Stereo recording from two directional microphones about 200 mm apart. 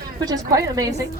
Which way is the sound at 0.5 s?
15° right (ahead or behind).